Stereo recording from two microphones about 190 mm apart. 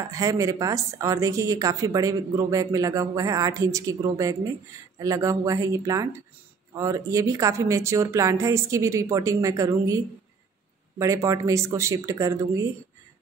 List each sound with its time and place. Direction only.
0.1 s a woman's voice: 15° right (ahead or behind)